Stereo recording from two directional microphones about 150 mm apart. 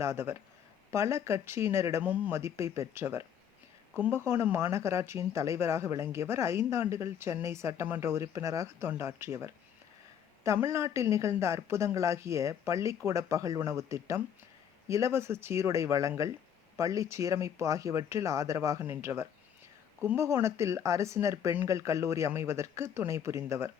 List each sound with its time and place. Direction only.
0.0 s speech: 15° right (ahead or behind)